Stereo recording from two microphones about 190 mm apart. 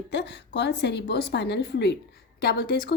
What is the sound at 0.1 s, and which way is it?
A woman's voice, 65° left (ahead or behind).